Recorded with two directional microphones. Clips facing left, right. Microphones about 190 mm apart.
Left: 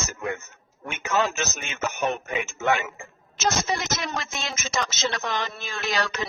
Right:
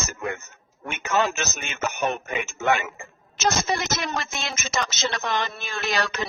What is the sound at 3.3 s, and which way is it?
Speech, 60° right (ahead or behind).